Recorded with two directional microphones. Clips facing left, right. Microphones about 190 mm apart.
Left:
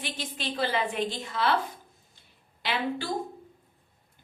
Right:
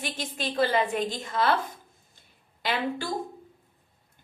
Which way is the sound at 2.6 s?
45° right (ahead or behind).